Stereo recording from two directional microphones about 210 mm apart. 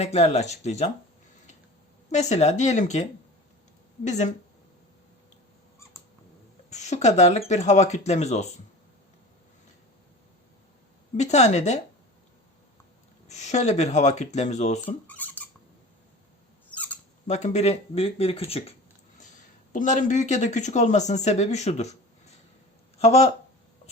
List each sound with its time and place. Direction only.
0.0 s speech: 30° left (ahead or behind)
2.0 s speech: 30° left (ahead or behind)
6.7 s speech: 35° left (ahead or behind)
11.2 s speech: 30° left (ahead or behind)
13.2 s speech: 35° left (ahead or behind)
15.0 s rodents: 10° left (ahead or behind)
16.7 s a sound: 5° left (ahead or behind)
17.2 s speech: 35° left (ahead or behind)
19.7 s speech: 35° left (ahead or behind)
23.0 s speech: 30° left (ahead or behind)